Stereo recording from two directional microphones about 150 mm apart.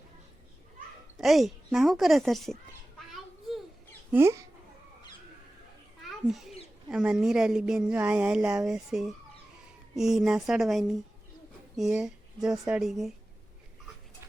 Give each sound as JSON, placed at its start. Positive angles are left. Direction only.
{"t": 1.1, "sound": "speech", "side_deg": 0}
{"t": 4.1, "sound": "speech", "side_deg": -20}
{"t": 6.0, "sound": "children playing", "side_deg": 0}
{"t": 6.9, "sound": "speech", "side_deg": -5}